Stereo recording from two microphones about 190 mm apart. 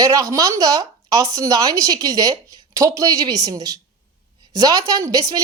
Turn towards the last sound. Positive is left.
turn(degrees=-15)  # may be behind; listen again after turning